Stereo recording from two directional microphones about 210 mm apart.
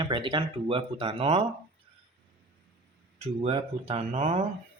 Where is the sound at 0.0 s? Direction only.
25° right (ahead or behind).